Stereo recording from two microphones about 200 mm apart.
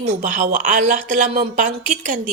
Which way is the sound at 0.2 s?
40° right (ahead or behind).